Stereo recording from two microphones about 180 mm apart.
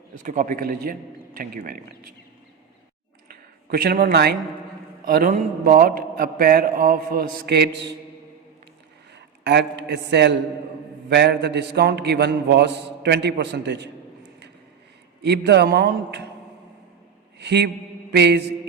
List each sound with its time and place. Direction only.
0.1 s a man's voice: 50° right (ahead or behind)
3.2 s a sound: 55° right (ahead or behind)
5.0 s a man's voice: 50° right (ahead or behind); by 7.9 s 75° right (ahead or behind)
9.1 s a man's voice: 75° right (ahead or behind)
15.2 s a man's voice: 70° right (ahead or behind)
17.4 s mantra: 70° right (ahead or behind)
18.1 s a man's voice: 70° right (ahead or behind)